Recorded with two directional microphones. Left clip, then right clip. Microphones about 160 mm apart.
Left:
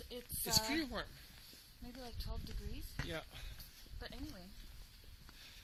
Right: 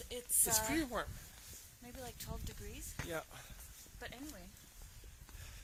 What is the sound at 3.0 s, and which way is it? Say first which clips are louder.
Speech: right 2 dB; 20° right (ahead or behind).